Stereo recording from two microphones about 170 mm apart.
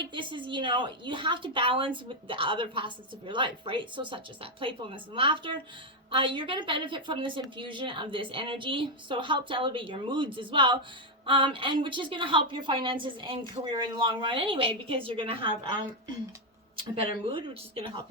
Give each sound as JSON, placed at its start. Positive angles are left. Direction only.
{"t": 0.1, "sound": "a woman's voice", "side_deg": -30}
{"t": 17.2, "sound": "a woman's voice", "side_deg": -30}